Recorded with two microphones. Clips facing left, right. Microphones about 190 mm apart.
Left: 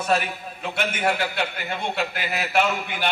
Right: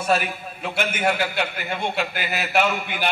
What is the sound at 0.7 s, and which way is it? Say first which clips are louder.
A man's voice: right 1 dB; 5° right (ahead or behind).